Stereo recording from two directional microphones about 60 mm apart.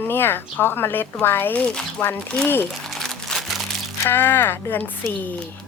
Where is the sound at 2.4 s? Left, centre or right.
Left.